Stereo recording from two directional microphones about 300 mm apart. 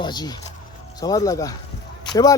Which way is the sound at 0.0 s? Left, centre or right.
Centre.